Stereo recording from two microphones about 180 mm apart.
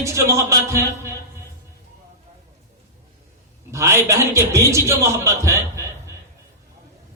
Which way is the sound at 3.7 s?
15° right (ahead or behind).